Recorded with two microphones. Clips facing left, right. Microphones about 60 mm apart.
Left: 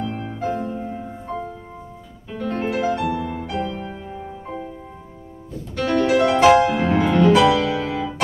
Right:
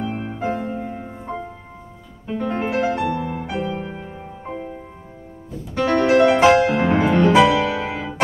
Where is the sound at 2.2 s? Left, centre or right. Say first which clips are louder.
Right 2 dB; right.